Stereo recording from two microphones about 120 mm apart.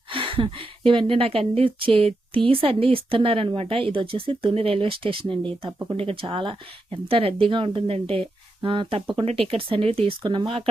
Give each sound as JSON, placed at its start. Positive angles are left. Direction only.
{"t": 0.1, "sound": "speech", "side_deg": -45}